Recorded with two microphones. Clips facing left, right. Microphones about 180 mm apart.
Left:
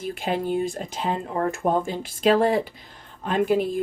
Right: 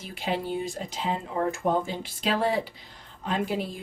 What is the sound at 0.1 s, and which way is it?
Speech, 50° left (ahead or behind).